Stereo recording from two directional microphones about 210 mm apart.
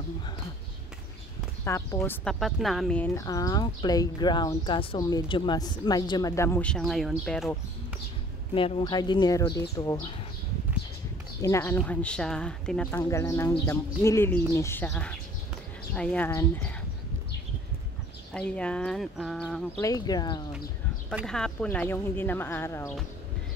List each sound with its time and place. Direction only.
1.6 s speech: 15° left (ahead or behind)
8.5 s speech: 25° left (ahead or behind)
11.4 s speech: 10° left (ahead or behind)
18.3 s speech: 5° left (ahead or behind)
19.8 s speech: 15° left (ahead or behind)
21.1 s speech: centre (ahead or behind)